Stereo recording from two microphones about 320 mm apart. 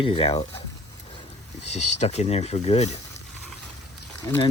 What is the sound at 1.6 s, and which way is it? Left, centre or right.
Speech, left.